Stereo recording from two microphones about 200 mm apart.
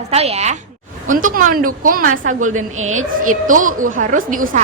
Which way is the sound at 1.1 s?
40° right (ahead or behind).